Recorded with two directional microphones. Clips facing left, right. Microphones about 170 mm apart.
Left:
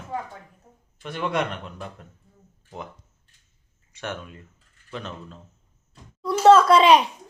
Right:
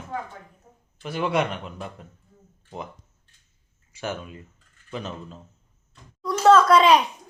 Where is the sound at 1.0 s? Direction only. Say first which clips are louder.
Right 2 dB; 5° right (ahead or behind).